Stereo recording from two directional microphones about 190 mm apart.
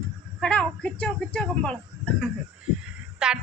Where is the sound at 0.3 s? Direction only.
5° left (ahead or behind).